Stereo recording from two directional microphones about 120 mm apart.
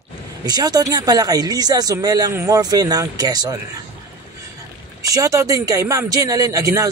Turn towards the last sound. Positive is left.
turn(degrees=-30)  # may be behind; listen again after turning